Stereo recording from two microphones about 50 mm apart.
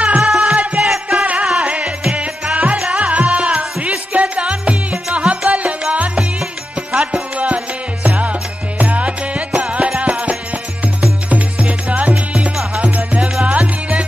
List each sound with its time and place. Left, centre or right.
0.2 s music: centre
0.6 s music: right
0.8 s music: centre
1.4 s music: centre
5.5 s music: right
6.9 s music: centre
7.3 s music: right
12.5 s music: centre